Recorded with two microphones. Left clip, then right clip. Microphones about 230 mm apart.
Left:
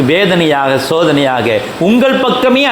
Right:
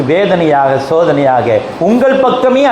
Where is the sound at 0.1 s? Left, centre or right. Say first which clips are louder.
Right 2 dB; left.